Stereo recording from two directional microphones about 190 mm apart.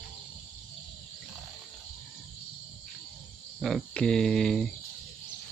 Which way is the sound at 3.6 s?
Centre (ahead or behind).